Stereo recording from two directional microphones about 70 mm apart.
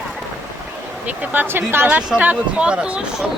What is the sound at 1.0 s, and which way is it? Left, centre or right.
Speech, right.